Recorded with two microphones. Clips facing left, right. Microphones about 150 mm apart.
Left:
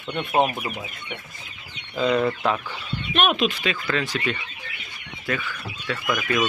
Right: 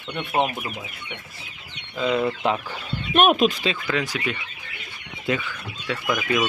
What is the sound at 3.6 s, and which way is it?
Speech, 20° right (ahead or behind).